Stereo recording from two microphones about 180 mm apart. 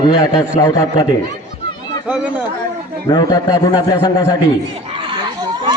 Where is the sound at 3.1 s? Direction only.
20° left (ahead or behind).